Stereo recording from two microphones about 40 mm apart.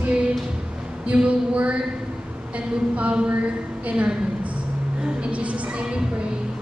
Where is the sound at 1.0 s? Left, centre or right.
Right.